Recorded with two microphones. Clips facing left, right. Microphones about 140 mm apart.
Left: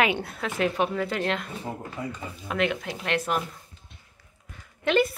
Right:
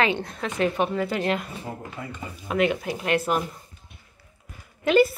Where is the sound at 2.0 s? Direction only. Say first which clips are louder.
Left 6 dB; 15° left (ahead or behind).